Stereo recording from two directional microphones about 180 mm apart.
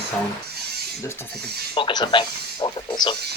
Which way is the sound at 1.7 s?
25° left (ahead or behind).